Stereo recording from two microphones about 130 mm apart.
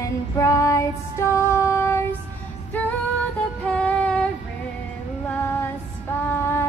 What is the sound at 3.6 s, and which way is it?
Female singing, 10° left (ahead or behind).